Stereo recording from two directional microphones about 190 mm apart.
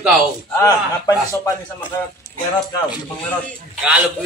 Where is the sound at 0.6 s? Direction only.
15° left (ahead or behind).